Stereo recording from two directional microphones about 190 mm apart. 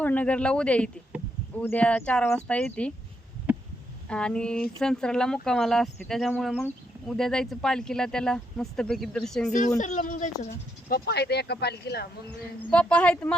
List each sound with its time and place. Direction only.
0.0 s speech: 10° left (ahead or behind)
4.1 s speech: 5° left (ahead or behind)
9.5 s speech: 40° left (ahead or behind); by 12.0 s 60° left (ahead or behind)
12.7 s speech: 5° left (ahead or behind)